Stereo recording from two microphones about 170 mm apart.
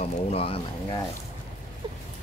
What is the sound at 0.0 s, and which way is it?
Speech, 35° left (ahead or behind).